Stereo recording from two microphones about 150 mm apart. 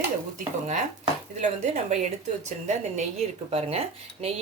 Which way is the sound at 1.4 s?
50° right (ahead or behind).